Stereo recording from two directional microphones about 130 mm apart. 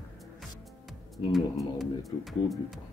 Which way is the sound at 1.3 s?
Centre (ahead or behind).